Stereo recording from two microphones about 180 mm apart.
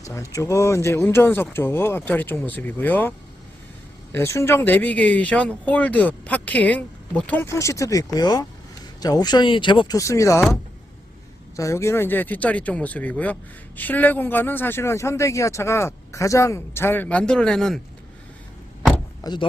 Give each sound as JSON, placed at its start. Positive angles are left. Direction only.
{"t": 0.0, "sound": "speech", "side_deg": 15}
{"t": 11.5, "sound": "speech", "side_deg": 15}
{"t": 19.2, "sound": "speech", "side_deg": 25}